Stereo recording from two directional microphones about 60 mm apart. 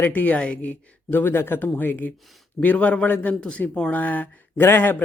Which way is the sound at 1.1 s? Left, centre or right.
Left.